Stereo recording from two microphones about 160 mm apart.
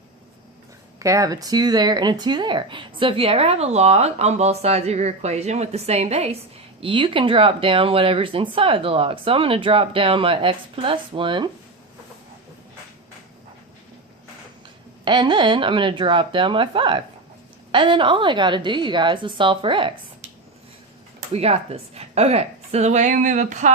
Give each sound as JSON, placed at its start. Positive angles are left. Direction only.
{"t": 0.9, "sound": "speech", "side_deg": -20}
{"t": 15.0, "sound": "speech", "side_deg": -30}
{"t": 21.3, "sound": "a woman's voice", "side_deg": -40}